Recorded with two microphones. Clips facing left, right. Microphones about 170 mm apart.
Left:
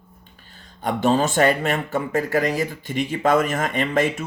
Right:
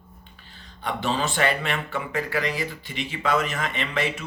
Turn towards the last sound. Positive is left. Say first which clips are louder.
# left 6 dB
turn(degrees=45)  # may be behind; listen again after turning